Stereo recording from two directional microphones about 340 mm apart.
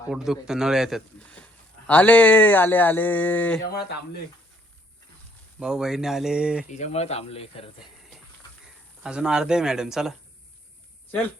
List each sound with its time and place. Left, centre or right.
0.1 s speech: centre
5.5 s speech: centre
6.7 s speech: centre
9.0 s speech: centre